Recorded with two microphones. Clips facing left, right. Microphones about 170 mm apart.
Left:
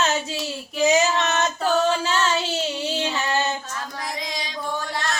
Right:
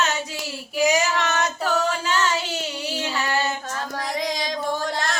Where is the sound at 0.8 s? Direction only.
25° left (ahead or behind).